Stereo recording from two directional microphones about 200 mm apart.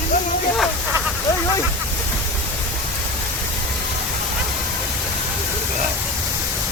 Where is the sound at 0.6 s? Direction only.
5° right (ahead or behind).